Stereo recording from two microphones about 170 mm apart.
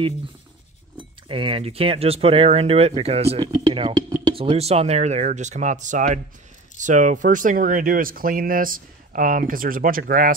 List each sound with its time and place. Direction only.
0.9 s speech: 30° right (ahead or behind)
3.3 s speech: 25° right (ahead or behind); by 10.3 s 55° right (ahead or behind)